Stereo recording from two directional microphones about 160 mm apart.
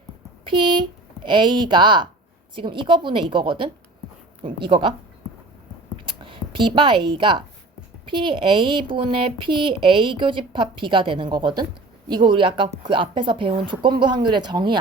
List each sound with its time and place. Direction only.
0.4 s a woman's voice: 30° right (ahead or behind)
6.1 s a woman's voice: 30° right (ahead or behind)